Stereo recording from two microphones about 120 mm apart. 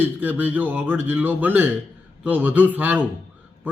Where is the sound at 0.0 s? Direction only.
15° right (ahead or behind).